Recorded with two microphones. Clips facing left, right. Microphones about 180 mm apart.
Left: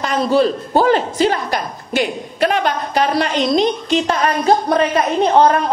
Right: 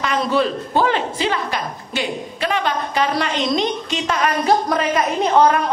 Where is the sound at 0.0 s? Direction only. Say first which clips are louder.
Left 4 dB; 35° left (ahead or behind).